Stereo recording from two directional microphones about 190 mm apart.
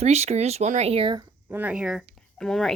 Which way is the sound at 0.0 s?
35° right (ahead or behind).